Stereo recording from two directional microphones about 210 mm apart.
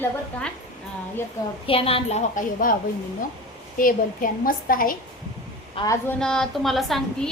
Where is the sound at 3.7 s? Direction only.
40° left (ahead or behind).